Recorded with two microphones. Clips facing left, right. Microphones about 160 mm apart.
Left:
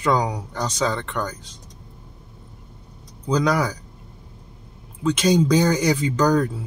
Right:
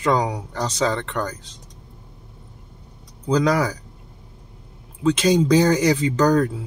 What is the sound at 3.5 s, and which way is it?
Speech, 45° right (ahead or behind).